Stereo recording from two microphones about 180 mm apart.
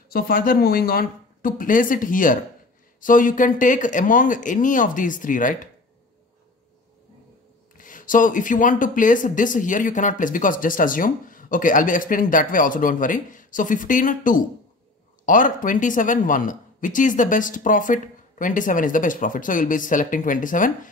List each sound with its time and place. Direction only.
0.1 s speech: 50° left (ahead or behind)
7.7 s speech: 50° left (ahead or behind)